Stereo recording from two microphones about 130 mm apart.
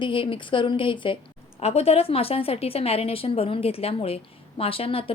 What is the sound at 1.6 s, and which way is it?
A woman's voice, 50° left (ahead or behind).